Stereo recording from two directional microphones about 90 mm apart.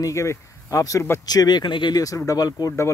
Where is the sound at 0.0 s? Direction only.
30° left (ahead or behind).